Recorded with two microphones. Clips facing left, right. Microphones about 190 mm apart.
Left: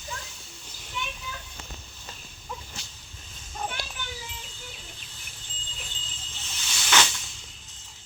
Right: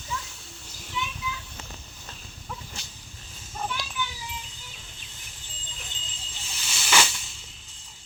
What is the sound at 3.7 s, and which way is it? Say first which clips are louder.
Children playing: right 4 dB; 50° left (ahead or behind).